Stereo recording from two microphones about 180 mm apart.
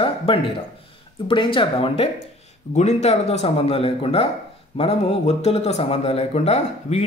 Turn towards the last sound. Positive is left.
turn(degrees=40)  # may be behind; listen again after turning